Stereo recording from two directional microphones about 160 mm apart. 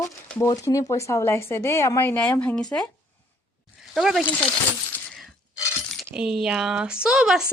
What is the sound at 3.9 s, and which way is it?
Speech, centre (ahead or behind).